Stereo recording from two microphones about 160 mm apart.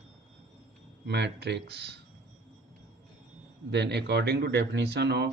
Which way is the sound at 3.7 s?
90° right.